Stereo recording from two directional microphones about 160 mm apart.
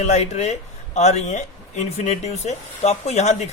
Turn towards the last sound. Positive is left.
turn(degrees=45)  # may be behind; listen again after turning